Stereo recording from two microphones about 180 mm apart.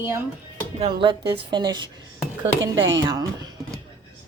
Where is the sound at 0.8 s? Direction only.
25° right (ahead or behind).